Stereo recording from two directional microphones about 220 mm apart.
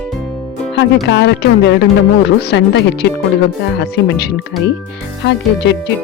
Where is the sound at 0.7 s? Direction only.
55° left (ahead or behind).